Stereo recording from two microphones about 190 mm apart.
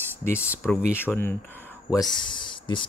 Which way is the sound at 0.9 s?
10° left (ahead or behind).